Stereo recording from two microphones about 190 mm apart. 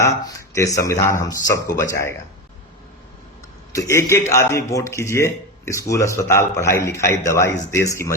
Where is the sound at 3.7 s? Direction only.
15° left (ahead or behind).